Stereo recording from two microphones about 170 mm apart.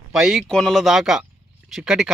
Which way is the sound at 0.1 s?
5° right (ahead or behind).